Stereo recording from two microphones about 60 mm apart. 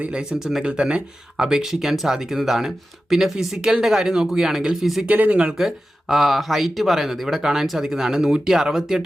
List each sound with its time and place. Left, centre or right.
0.0 s speech: centre
5.0 s speech: right
5.5 s speech: centre